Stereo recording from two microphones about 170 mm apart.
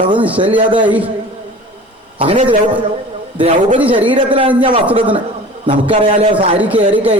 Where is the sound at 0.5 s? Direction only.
30° right (ahead or behind).